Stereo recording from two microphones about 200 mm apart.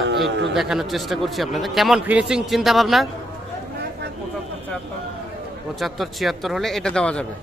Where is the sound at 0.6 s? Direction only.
Centre (ahead or behind).